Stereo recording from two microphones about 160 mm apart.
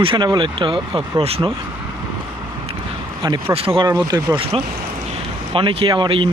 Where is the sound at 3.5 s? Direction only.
35° right (ahead or behind).